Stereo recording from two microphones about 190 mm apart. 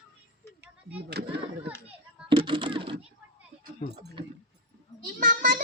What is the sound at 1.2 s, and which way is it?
Children playing, 60° right (ahead or behind).